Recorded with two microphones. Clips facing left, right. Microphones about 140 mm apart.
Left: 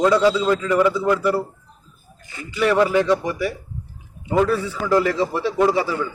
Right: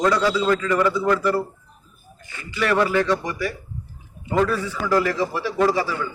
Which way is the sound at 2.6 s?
15° left (ahead or behind).